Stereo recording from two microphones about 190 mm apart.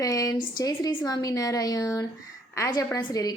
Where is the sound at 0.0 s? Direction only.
15° left (ahead or behind).